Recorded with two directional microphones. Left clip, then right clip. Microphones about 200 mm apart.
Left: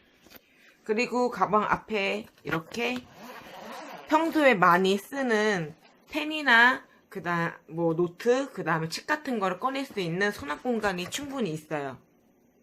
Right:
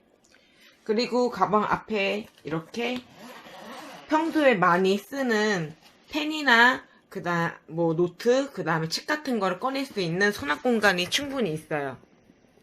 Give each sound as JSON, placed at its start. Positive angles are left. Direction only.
{"t": 0.9, "sound": "speech", "side_deg": -25}
{"t": 4.1, "sound": "speech", "side_deg": -10}